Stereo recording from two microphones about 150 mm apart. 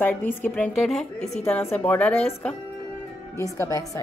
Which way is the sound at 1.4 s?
15° left (ahead or behind).